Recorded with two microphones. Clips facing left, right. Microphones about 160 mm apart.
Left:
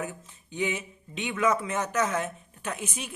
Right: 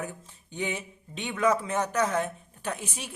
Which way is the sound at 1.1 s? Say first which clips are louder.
Even; 35° right (ahead or behind).